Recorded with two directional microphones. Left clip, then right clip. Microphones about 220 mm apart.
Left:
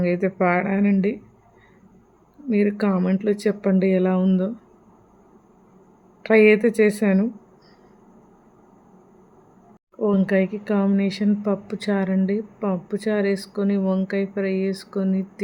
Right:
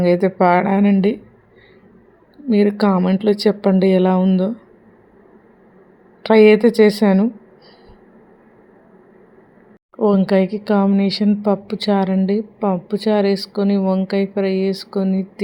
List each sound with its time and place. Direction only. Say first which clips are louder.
0.0 s a woman's voice: right 7 dB; 15° right (ahead or behind)
2.5 s a woman's voice: right 6 dB; 10° right (ahead or behind)
6.2 s a woman's voice: right 5 dB; 15° right (ahead or behind)
10.0 s a woman's voice: right 5 dB; 15° right (ahead or behind)